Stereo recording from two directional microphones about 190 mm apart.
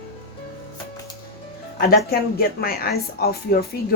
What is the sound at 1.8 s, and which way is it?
Speech, 50° left (ahead or behind).